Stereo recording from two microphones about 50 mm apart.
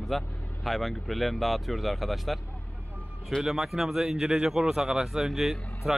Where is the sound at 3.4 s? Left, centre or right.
Centre.